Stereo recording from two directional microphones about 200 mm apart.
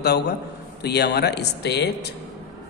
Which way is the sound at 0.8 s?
55° left (ahead or behind).